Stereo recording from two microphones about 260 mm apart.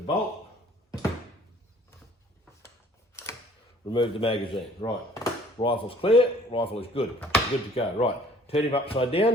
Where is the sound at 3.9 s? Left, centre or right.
Centre.